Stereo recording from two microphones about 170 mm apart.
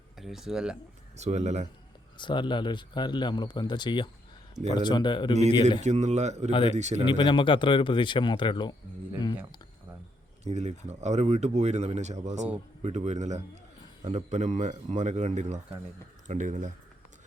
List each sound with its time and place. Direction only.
0.2 s speech: centre (ahead or behind)
1.1 s speech: 40° right (ahead or behind)
2.1 s speech: 30° left (ahead or behind)
5.8 s speech: 40° right (ahead or behind)
6.5 s speech: 30° left (ahead or behind)
6.7 s speech: 40° right (ahead or behind)
7.0 s speech: 30° left (ahead or behind)
10.4 s a man's voice: 40° right (ahead or behind)